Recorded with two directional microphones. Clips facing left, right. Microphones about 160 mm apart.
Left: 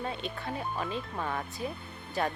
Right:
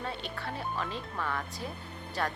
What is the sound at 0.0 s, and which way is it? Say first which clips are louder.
Speech: left 2 dB; 20° left (ahead or behind).